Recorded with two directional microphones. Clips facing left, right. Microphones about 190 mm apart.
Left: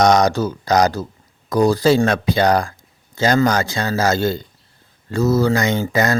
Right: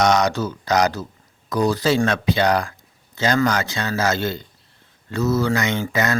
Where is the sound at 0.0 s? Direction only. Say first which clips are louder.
Left 4 dB; 35° left (ahead or behind).